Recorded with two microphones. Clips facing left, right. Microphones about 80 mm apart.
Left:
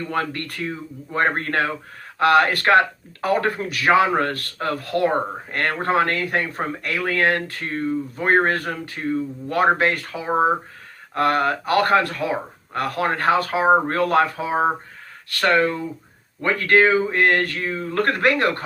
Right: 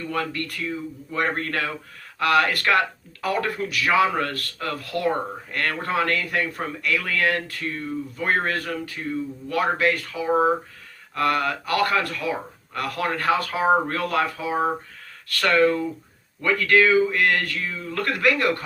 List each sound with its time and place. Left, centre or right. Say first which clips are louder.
0.0 s speech: left 2 dB; left
13.5 s speech: left 3 dB; left
13.8 s speech: left 5 dB; left